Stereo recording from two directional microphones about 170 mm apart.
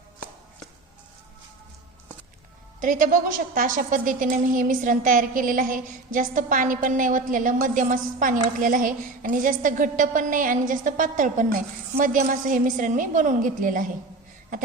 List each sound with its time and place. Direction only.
2.8 s a woman's voice: 50° right (ahead or behind)